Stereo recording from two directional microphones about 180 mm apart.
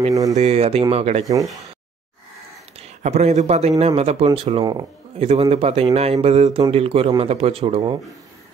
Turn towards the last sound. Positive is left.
turn(degrees=-25)  # may be behind; listen again after turning